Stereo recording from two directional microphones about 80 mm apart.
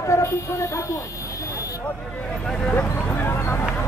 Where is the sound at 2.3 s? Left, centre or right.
Centre.